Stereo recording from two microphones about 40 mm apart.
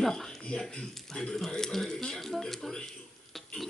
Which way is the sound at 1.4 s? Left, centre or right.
Centre.